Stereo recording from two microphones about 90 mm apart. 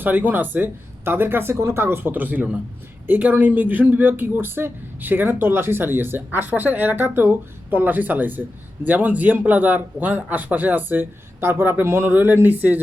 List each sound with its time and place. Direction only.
0.0 s speech: 20° right (ahead or behind)